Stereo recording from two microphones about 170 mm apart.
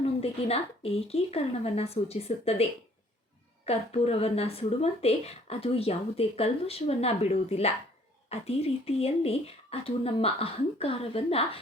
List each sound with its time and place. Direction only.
0.0 s speech: 35° left (ahead or behind)
3.7 s speech: 40° left (ahead or behind)